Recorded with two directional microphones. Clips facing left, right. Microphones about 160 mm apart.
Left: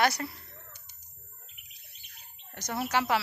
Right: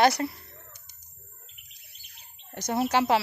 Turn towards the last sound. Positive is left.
turn(degrees=-25)  # may be behind; listen again after turning